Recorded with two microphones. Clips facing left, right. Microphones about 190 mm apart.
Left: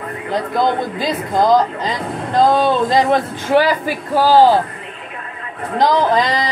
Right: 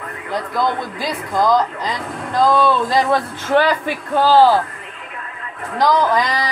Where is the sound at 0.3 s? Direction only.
20° left (ahead or behind).